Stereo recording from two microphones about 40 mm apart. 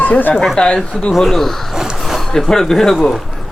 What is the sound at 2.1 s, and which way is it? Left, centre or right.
Speech, centre.